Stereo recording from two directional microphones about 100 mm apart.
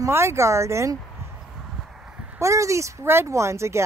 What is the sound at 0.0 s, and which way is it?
Speech, 25° right (ahead or behind).